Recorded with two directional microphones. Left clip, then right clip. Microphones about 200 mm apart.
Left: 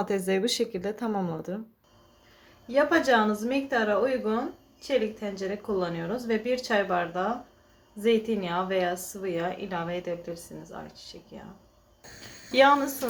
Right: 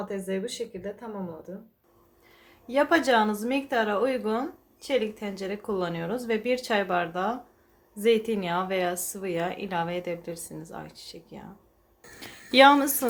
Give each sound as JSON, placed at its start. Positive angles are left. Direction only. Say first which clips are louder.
{"t": 0.0, "sound": "speech", "louder": "left 5 dB", "side_deg": 45}
{"t": 2.6, "sound": "a woman's voice", "louder": "even", "side_deg": -30}